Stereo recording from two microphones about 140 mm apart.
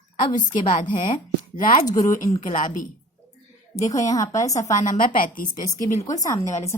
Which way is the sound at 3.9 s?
25° left (ahead or behind).